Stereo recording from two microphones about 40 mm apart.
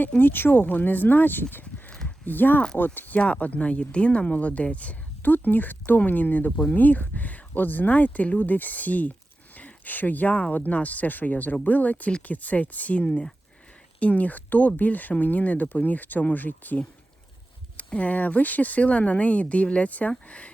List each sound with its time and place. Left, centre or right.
0.2 s speech: left
3.2 s speech: left
5.3 s speech: left
9.6 s a sound: left
10.5 s speech: left
17.7 s speech: left